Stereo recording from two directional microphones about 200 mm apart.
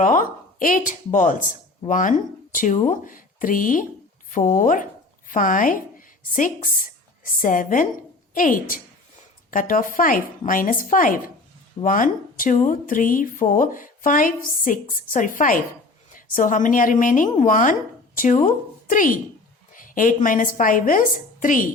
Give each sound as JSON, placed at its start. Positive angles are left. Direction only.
{"t": 0.0, "sound": "a woman's voice", "side_deg": 40}